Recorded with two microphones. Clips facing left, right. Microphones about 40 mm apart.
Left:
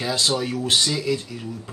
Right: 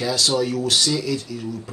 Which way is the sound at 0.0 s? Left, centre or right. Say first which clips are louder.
Right 2 dB; left.